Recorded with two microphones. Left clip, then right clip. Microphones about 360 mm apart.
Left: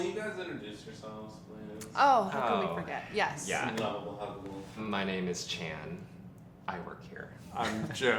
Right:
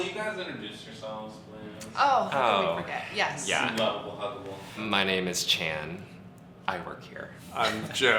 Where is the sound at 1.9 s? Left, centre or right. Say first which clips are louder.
Right 1 dB; left.